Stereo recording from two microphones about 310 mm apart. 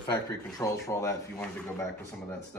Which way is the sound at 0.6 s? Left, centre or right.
Centre.